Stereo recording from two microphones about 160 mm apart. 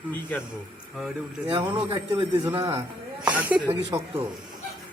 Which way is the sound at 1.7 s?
30° right (ahead or behind).